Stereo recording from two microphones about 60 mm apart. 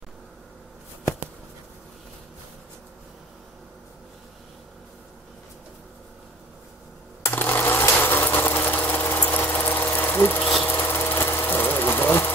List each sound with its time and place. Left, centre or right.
7.3 s a sound: left
10.4 s insect: centre
10.7 s vehicle: left